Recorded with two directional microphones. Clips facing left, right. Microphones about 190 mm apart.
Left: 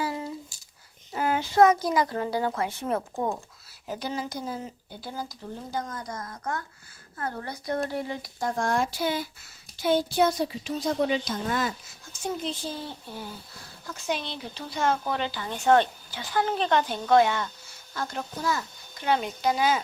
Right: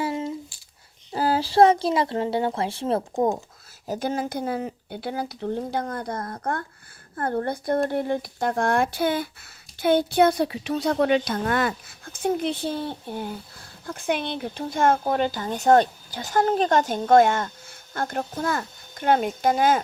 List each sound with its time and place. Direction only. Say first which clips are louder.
0.0 s a sound: right 4 dB; 20° right (ahead or behind)
1.1 s speech: right 4 dB; 35° right (ahead or behind)
3.8 s speech: right 6 dB; 45° right (ahead or behind)